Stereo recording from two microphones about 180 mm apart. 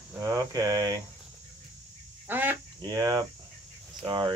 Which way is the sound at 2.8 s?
20° right (ahead or behind).